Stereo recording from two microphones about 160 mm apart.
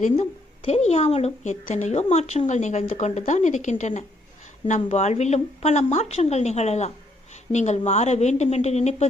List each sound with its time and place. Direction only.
0.0 s a woman's voice: 40° left (ahead or behind)